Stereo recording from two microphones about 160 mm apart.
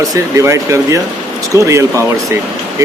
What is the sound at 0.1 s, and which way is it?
Speech, 20° right (ahead or behind).